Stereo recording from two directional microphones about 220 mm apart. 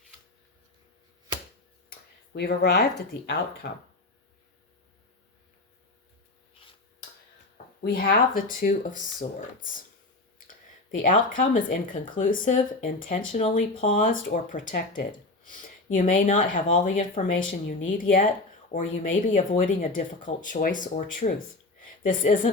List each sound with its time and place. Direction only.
1.9 s a sound: 45° left (ahead or behind)
3.6 s speech: 45° left (ahead or behind)
7.8 s speech: 40° left (ahead or behind)
11.0 s speech: 35° left (ahead or behind)